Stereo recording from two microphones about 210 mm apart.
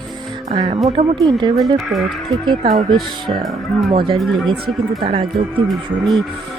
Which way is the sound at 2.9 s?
Centre (ahead or behind).